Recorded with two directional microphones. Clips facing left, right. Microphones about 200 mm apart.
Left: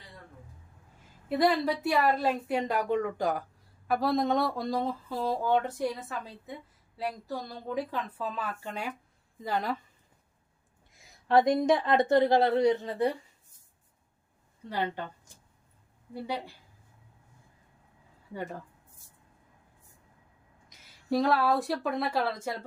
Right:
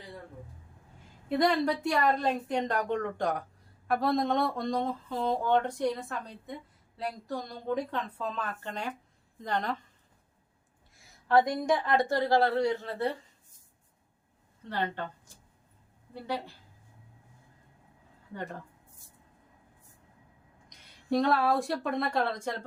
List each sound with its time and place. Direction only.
1.3 s a sound: 5° left (ahead or behind)
10.9 s speech: 20° left (ahead or behind)
14.7 s speech: 10° left (ahead or behind)
16.2 s speech: 10° left (ahead or behind)
20.7 s speech: 5° left (ahead or behind)